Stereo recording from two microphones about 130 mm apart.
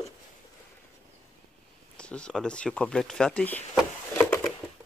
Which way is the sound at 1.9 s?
10° left (ahead or behind).